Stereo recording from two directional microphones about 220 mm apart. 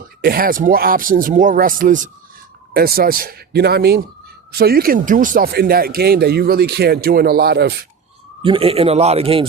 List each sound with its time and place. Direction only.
0.2 s speech: 40° right (ahead or behind)
8.4 s speech: 25° right (ahead or behind)